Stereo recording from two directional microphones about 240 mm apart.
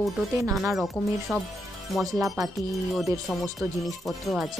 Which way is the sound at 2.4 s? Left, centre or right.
Centre.